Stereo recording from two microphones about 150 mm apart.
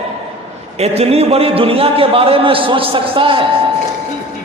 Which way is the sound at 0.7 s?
45° right (ahead or behind).